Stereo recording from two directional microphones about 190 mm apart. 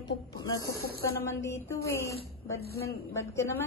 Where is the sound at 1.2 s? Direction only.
15° left (ahead or behind).